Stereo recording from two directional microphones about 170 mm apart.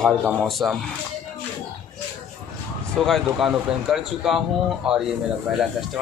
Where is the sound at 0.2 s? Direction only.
10° right (ahead or behind).